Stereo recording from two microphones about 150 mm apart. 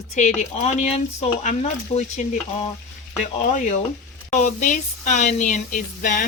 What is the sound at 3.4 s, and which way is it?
Speech, 55° left (ahead or behind).